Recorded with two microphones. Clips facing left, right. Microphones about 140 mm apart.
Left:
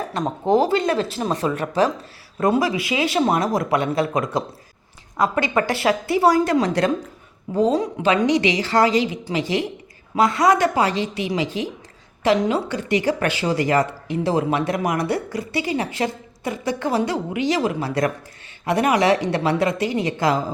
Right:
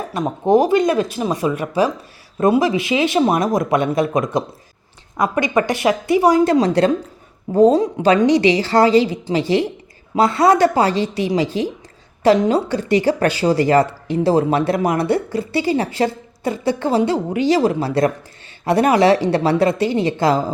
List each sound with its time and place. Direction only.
0.1 s speech: 15° right (ahead or behind)
2.6 s speech: 25° right (ahead or behind)
6.4 s a woman's voice: 30° right (ahead or behind)